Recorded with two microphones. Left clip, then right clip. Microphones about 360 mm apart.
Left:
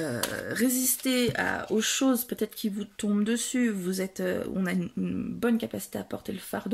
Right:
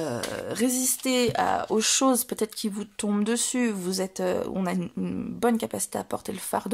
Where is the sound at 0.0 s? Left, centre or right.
Centre.